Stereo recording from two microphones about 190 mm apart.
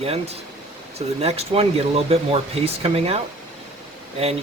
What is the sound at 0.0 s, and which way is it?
Speech, 30° right (ahead or behind).